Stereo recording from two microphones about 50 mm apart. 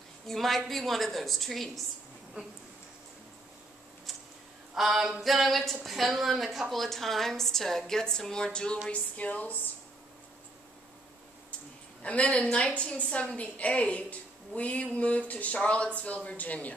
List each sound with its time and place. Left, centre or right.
0.3 s speech: centre
4.7 s a woman's voice: centre
9.1 s a woman's voice: left
12.0 s a woman's voice: left